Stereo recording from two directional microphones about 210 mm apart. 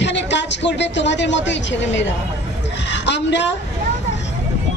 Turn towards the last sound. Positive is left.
turn(degrees=55)  # may be behind; listen again after turning